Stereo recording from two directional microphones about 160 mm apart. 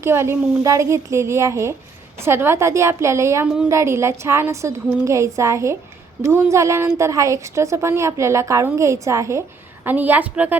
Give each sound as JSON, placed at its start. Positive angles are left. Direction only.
{"t": 0.0, "sound": "a woman's voice", "side_deg": -15}